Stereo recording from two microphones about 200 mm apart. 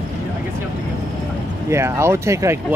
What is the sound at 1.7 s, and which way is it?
Speech, 15° right (ahead or behind).